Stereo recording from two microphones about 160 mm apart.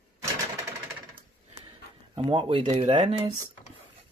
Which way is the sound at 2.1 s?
35° right (ahead or behind).